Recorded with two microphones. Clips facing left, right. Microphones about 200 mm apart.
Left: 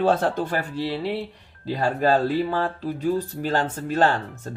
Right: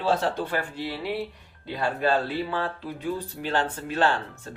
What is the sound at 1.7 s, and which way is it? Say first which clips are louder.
Speech: left 4 dB; 45° left (ahead or behind).